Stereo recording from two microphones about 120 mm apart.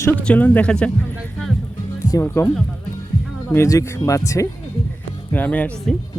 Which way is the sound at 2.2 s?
20° left (ahead or behind).